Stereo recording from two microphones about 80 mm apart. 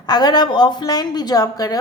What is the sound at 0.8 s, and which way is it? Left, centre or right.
Speech, left.